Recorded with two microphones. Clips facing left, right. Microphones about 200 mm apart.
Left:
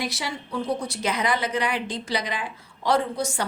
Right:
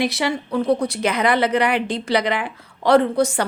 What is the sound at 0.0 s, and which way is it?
A woman's voice, 65° right (ahead or behind).